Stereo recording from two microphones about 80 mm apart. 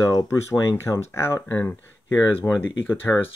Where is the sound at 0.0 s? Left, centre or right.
Left.